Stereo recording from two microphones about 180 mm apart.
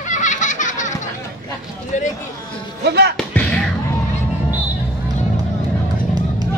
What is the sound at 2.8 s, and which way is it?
Music, 65° right (ahead or behind).